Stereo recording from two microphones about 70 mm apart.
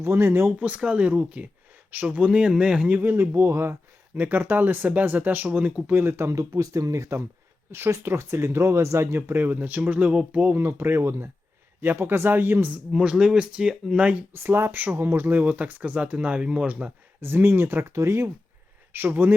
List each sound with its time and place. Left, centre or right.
0.0 s speech: right
0.6 s speech: centre
3.0 s speech: right
6.0 s speech: right
6.3 s speech: right
10.6 s speech: right
13.0 s speech: centre
14.3 s speech: right; by 16.9 s centre
17.2 s speech: right
18.9 s speech: right